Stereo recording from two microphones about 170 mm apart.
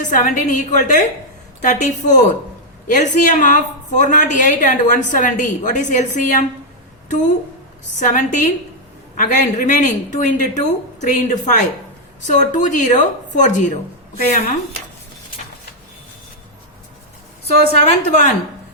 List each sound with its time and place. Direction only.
0.0 s a woman's voice: 50° left (ahead or behind)
1.6 s a woman's voice: 45° left (ahead or behind)
7.9 s a woman's voice: 50° left (ahead or behind)
17.4 s a woman's voice: 40° left (ahead or behind)